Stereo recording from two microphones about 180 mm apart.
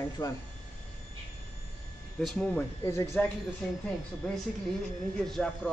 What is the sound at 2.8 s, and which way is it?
Speech, 15° left (ahead or behind).